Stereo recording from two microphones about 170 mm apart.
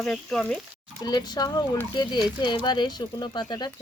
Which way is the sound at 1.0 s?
25° left (ahead or behind).